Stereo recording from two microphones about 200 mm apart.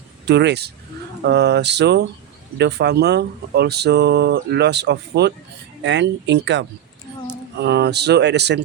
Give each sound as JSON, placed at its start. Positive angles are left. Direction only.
{"t": 0.3, "sound": "speech", "side_deg": -60}